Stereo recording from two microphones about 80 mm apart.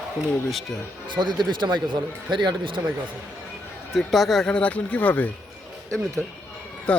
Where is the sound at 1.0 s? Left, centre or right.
Right.